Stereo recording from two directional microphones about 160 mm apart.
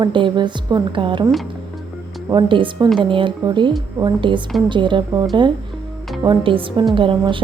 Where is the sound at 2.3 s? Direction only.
30° right (ahead or behind).